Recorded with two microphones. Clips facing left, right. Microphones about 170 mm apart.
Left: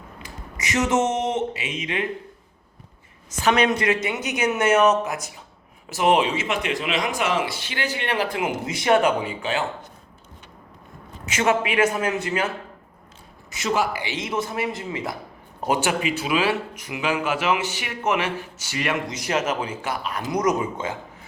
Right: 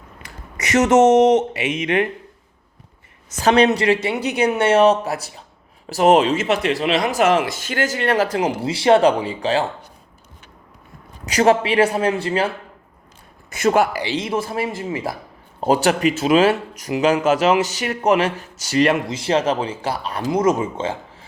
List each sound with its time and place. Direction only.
0.2 s a sound: 65° right (ahead or behind)
0.9 s speech: 85° right
1.5 s speech: 65° right (ahead or behind)
3.4 s speech: 35° right (ahead or behind)
11.3 s speech: 35° right (ahead or behind)
13.5 s a man's voice: 55° right (ahead or behind)
14.2 s speech: 30° right (ahead or behind)
19.1 s speech: 30° right (ahead or behind)